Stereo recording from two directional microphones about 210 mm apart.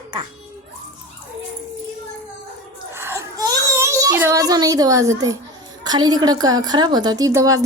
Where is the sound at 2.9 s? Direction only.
10° right (ahead or behind).